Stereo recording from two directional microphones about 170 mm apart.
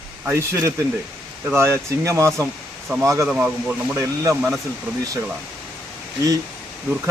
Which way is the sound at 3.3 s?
5° right (ahead or behind).